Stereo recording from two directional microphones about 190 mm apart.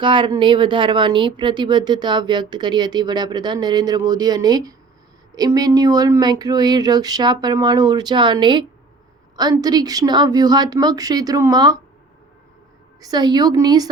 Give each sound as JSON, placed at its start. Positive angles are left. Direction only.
{"t": 0.0, "sound": "speech", "side_deg": -25}
{"t": 13.0, "sound": "speech", "side_deg": -20}